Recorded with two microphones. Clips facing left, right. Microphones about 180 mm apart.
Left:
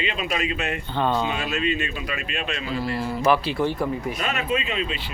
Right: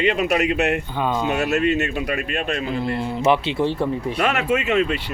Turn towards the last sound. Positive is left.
turn(degrees=-70)  # may be behind; listen again after turning